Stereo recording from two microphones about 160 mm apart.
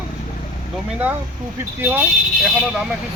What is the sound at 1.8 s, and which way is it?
Speech, 10° right (ahead or behind).